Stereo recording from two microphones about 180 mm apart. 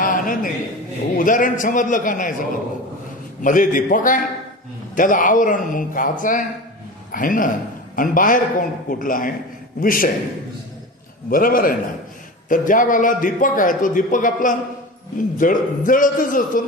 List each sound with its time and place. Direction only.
0.0 s a sound: 50° left (ahead or behind)
1.1 s a man's voice: 50° left (ahead or behind)
11.2 s a man's voice: 50° left (ahead or behind)